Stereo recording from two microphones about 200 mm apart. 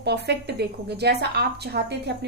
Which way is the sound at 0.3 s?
55° right (ahead or behind).